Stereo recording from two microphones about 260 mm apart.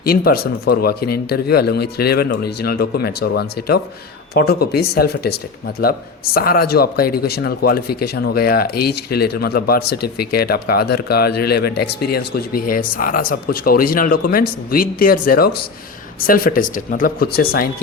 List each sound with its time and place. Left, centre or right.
0.0 s speech: left